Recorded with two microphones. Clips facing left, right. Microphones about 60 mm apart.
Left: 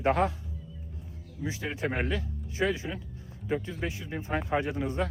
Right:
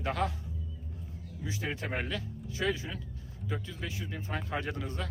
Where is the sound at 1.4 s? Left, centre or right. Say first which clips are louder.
Left 4 dB; left.